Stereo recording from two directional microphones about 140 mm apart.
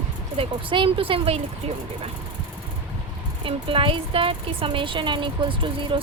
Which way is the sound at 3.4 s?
40° right (ahead or behind).